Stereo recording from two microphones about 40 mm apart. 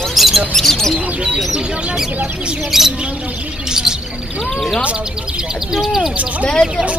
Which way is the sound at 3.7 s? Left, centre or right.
Centre.